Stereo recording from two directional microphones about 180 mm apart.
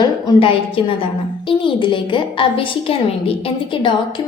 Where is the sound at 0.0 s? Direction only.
30° left (ahead or behind).